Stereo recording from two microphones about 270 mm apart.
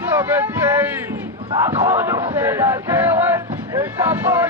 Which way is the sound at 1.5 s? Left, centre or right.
Centre.